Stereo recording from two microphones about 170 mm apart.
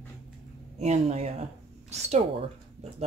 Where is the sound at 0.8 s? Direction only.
40° right (ahead or behind).